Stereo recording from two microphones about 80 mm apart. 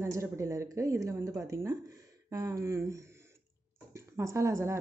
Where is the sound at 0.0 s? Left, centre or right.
Right.